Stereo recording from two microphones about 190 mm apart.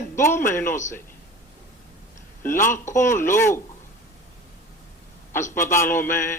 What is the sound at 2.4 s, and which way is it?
A man's voice, 15° left (ahead or behind).